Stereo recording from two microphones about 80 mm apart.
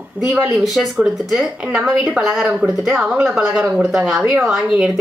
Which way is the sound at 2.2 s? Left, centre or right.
Centre.